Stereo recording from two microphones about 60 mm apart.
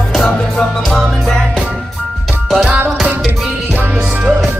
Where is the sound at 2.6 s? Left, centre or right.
Right.